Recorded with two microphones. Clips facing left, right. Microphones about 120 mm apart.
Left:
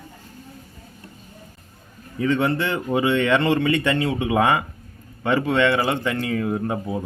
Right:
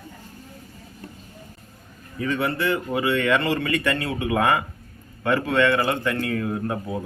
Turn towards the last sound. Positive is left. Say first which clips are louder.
# left 2 dB
turn(degrees=20)  # may be behind; listen again after turning